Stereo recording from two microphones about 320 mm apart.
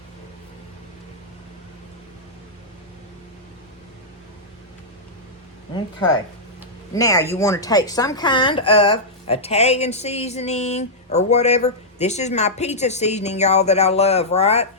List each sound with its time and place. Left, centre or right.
6.9 s speech: centre